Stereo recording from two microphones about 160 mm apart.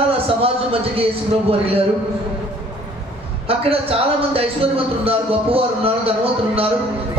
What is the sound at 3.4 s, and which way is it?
A man's voice, 35° right (ahead or behind).